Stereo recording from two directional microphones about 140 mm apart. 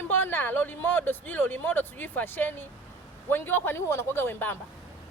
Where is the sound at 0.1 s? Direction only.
15° left (ahead or behind).